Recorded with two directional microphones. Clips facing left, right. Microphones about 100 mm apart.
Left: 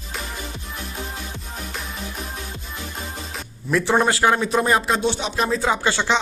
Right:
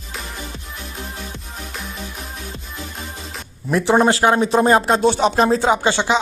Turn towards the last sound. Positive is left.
turn(degrees=-25)  # may be behind; listen again after turning